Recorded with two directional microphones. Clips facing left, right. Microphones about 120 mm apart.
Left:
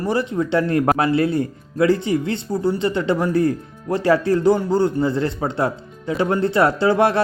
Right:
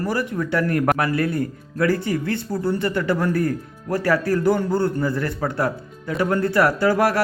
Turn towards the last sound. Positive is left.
turn(degrees=25)  # may be behind; listen again after turning